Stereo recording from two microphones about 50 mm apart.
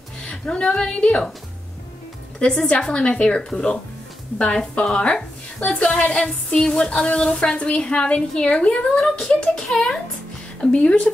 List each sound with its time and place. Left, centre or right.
0.2 s a woman's voice: centre
2.3 s a woman's voice: centre
10.6 s a woman's voice: left